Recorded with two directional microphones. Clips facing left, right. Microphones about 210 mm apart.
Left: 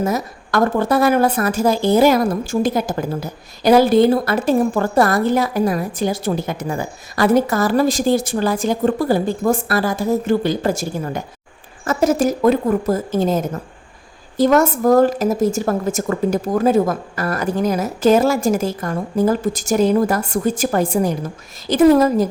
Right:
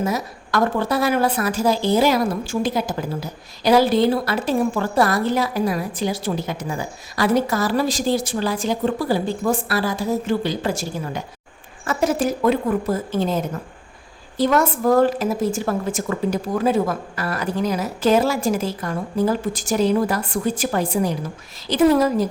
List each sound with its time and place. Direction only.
0.0 s a woman's voice: 50° left (ahead or behind)